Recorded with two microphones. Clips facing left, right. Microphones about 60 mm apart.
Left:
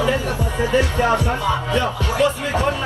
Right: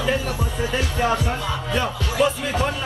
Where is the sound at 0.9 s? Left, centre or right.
Left.